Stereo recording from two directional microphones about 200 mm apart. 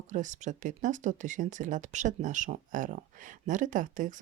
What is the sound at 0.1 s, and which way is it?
Speech, 40° right (ahead or behind).